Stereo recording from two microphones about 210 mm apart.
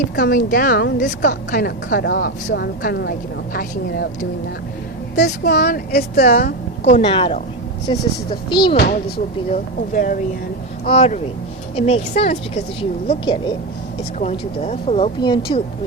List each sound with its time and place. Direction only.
0.2 s a woman's voice: 40° left (ahead or behind)
1.2 s a woman's voice: 40° left (ahead or behind)
6.8 s speech: 25° left (ahead or behind)
8.7 s a woman's voice: 50° left (ahead or behind); by 15.6 s 25° left (ahead or behind)